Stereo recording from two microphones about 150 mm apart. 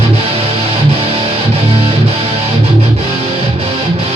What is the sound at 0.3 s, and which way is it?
Music, 40° right (ahead or behind).